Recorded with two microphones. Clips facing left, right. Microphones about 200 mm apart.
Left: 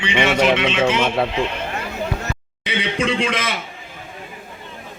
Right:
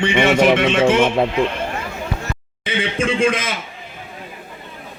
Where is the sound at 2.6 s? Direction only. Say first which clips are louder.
Right 1 dB; 45° right (ahead or behind).